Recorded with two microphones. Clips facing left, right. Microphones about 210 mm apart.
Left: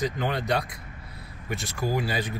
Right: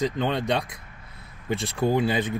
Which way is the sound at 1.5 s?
30° right (ahead or behind).